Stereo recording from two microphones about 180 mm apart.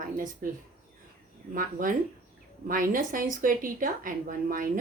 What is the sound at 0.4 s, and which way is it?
Speech, 50° right (ahead or behind).